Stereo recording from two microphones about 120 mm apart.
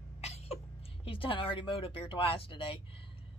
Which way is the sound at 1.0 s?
50° left (ahead or behind).